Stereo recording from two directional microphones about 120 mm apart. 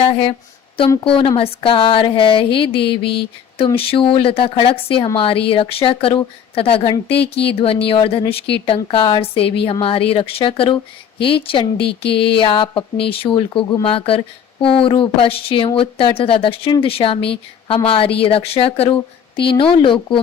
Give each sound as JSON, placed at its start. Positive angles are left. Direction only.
{"t": 0.1, "sound": "speech", "side_deg": 50}